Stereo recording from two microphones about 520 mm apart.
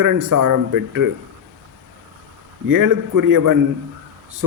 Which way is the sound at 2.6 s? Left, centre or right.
Right.